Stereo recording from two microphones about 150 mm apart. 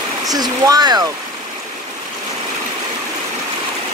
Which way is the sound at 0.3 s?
25° right (ahead or behind).